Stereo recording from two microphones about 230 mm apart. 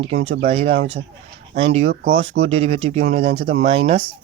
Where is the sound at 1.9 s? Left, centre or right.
Right.